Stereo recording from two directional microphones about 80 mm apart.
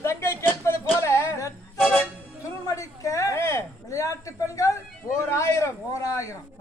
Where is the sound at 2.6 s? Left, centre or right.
Left.